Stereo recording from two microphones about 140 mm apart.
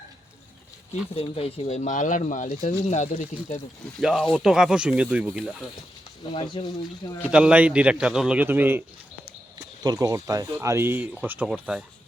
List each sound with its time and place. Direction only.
1.1 s speech: 45° left (ahead or behind); by 3.6 s 60° left (ahead or behind)
4.0 s speech: centre (ahead or behind)
6.3 s speech: 35° left (ahead or behind)
7.3 s speech: 5° right (ahead or behind)
9.8 s speech: 25° right (ahead or behind); by 11.8 s 5° right (ahead or behind)